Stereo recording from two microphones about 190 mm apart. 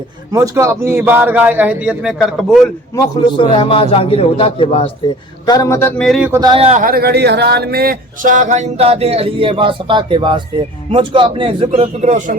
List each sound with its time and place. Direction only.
0.3 s a man's voice: 20° right (ahead or behind); by 2.6 s centre (ahead or behind)
2.9 s a man's voice: 25° left (ahead or behind)
5.5 s a man's voice: 15° left (ahead or behind)
6.0 s music: centre (ahead or behind)
6.4 s speech: 30° right (ahead or behind)